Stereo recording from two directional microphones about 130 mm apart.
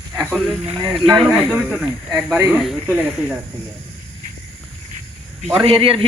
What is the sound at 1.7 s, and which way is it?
A man's voice, 5° right (ahead or behind).